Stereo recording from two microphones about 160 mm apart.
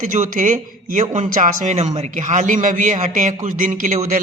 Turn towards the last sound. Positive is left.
turn(degrees=-55)  # may be behind; listen again after turning